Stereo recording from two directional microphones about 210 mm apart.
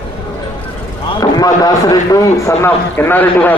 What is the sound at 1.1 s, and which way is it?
A man's voice, 15° left (ahead or behind).